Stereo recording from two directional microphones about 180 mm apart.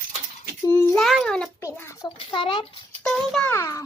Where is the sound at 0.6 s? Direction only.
15° left (ahead or behind).